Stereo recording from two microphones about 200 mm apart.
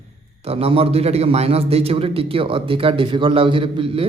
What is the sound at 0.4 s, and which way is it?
A man's voice, 30° right (ahead or behind).